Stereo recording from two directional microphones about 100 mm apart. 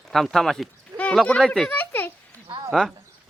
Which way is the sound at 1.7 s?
20° left (ahead or behind).